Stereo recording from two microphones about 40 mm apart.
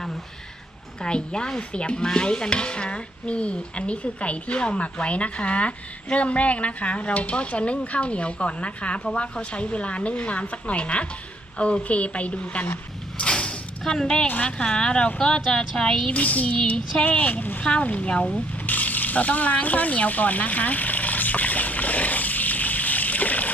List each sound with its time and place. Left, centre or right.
1.0 s a woman's voice: left
2.0 s stir: left
13.1 s mechanisms: left
13.8 s a woman's voice: centre
14.3 s a woman's voice: left
16.0 s stir: left
17.6 s a woman's voice: left
17.8 s stir: left
18.7 s a sound: left